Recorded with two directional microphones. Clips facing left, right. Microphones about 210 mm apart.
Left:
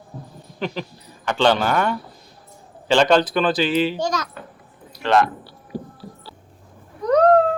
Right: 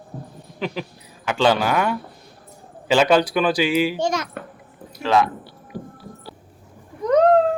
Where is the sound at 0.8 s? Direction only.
10° right (ahead or behind).